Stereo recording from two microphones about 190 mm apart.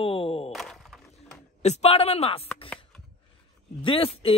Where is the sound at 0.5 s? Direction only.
Centre (ahead or behind).